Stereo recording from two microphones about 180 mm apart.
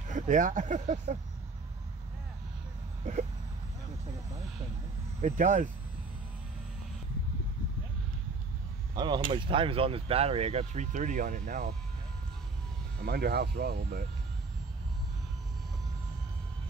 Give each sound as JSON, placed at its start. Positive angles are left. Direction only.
{"t": 0.1, "sound": "speech", "side_deg": -45}
{"t": 3.1, "sound": "speech", "side_deg": -40}
{"t": 5.2, "sound": "speech", "side_deg": -45}
{"t": 8.9, "sound": "speech", "side_deg": -25}
{"t": 13.0, "sound": "speech", "side_deg": -60}